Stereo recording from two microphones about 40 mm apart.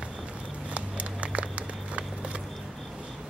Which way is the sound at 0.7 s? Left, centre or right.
Right.